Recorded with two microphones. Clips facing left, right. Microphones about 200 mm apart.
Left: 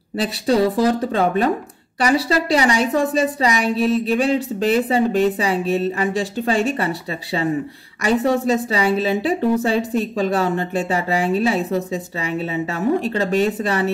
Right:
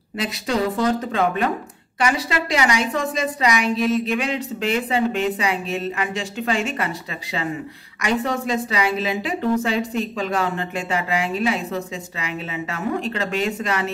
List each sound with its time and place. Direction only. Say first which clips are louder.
0.2 s speech: left 5 dB; 35° left (ahead or behind)